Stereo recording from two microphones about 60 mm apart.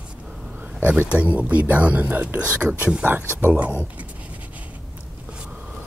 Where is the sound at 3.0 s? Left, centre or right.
Right.